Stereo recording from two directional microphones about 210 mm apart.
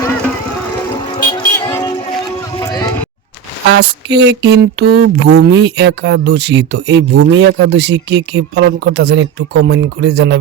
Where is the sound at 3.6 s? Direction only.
55° right (ahead or behind).